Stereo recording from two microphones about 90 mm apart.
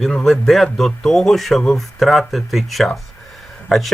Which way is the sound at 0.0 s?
5° left (ahead or behind).